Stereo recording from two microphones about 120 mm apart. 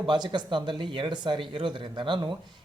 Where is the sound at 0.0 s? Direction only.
45° right (ahead or behind).